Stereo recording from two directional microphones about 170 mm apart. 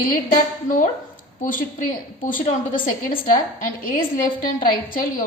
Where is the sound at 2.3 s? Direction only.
50° left (ahead or behind).